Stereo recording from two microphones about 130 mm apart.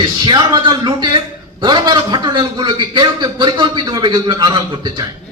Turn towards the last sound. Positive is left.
turn(degrees=-35)  # may be behind; listen again after turning